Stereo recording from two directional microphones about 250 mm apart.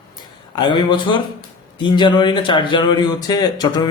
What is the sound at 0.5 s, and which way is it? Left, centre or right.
A man's voice, centre.